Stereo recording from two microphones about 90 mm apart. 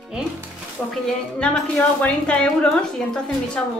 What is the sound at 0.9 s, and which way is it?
A woman's voice, 10° left (ahead or behind).